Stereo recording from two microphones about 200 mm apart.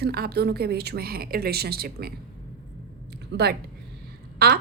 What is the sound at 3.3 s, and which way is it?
A woman's voice, 55° right (ahead or behind).